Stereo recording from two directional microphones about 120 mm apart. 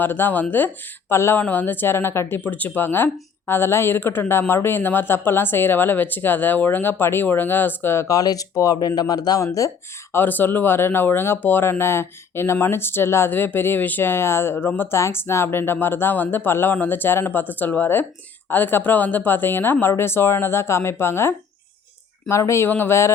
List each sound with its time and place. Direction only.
0.0 s speech: 15° left (ahead or behind)